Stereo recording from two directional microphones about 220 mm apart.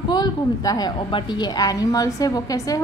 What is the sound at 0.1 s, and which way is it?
A woman's voice, 15° left (ahead or behind).